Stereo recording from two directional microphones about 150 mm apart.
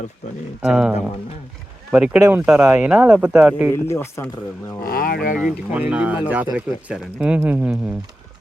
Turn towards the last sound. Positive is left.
turn(degrees=-10)  # may be behind; listen again after turning